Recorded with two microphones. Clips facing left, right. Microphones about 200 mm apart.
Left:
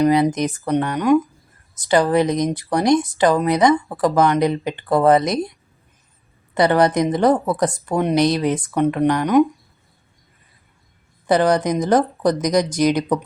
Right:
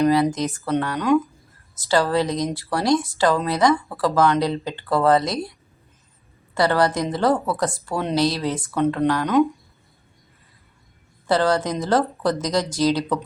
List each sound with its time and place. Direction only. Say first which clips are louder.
0.0 s a woman's voice: left 2 dB; 20° left (ahead or behind)
11.3 s speech: left 3 dB; 15° left (ahead or behind)